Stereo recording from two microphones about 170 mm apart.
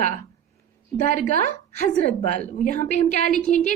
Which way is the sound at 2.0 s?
45° left (ahead or behind).